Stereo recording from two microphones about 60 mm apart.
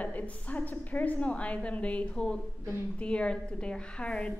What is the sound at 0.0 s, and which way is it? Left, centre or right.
A woman's voice, left.